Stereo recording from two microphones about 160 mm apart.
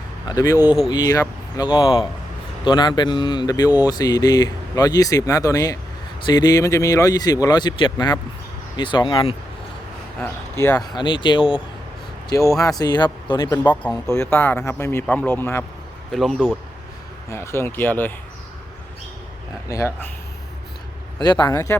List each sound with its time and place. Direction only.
0.3 s speech: 25° left (ahead or behind)
0.6 s speech: 10° right (ahead or behind)
0.9 s speech: 25° left (ahead or behind)
10.6 s speech: 15° left (ahead or behind)
10.9 s speech: 30° left (ahead or behind)
12.3 s speech: 20° left (ahead or behind)
16.1 s speech: centre (ahead or behind)
17.2 s speech: 15° left (ahead or behind)
19.6 s speech: 20° left (ahead or behind)
21.2 s speech: 30° left (ahead or behind)